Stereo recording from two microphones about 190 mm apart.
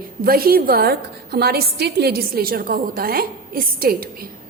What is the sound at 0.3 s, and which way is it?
A woman's voice, 50° right (ahead or behind).